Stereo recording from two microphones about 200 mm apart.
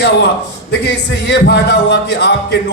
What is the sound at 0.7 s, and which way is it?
A man's voice, 55° left (ahead or behind).